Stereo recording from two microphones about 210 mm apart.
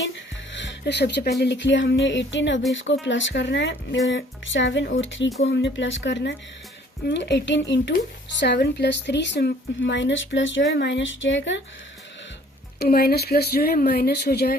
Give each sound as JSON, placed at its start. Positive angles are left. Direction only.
{"t": 0.5, "sound": "speech", "side_deg": 60}
{"t": 12.8, "sound": "speech", "side_deg": 45}